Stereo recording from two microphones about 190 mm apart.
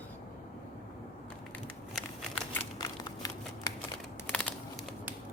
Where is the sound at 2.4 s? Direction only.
10° left (ahead or behind).